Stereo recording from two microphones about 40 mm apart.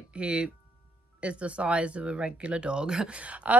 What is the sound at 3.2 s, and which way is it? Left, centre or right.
Speech, right.